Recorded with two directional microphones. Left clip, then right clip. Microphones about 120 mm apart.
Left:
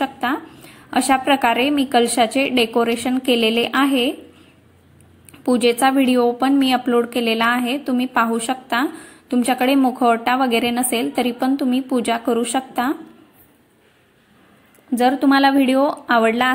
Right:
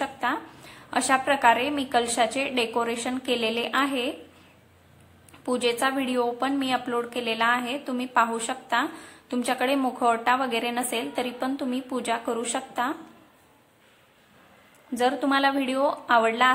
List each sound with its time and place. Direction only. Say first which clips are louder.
0.0 s a sound: left 6 dB; 35° left (ahead or behind)
0.7 s a woman's voice: left 6 dB; 30° left (ahead or behind)
5.4 s a woman's voice: left 8 dB; 30° left (ahead or behind)
15.0 s a woman's voice: left 7 dB; 30° left (ahead or behind)